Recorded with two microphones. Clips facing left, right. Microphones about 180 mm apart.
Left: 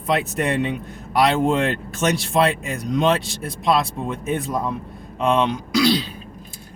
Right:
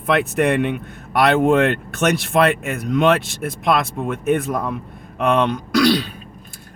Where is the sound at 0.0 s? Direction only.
60° right (ahead or behind).